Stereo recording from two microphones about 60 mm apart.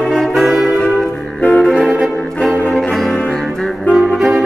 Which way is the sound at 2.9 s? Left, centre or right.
Centre.